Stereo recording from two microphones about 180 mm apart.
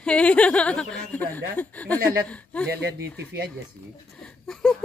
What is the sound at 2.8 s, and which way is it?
Speech, 65° right (ahead or behind).